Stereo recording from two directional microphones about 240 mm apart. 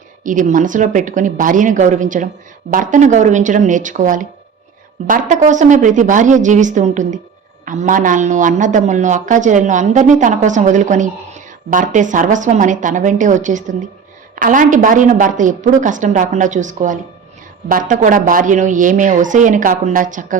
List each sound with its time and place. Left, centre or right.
0.3 s speech: right